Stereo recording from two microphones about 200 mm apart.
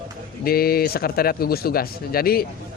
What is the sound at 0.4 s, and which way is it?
Speech, 50° left (ahead or behind).